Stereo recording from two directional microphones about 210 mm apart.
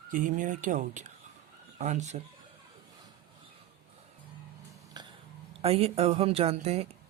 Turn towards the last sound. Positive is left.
turn(degrees=-30)  # may be behind; listen again after turning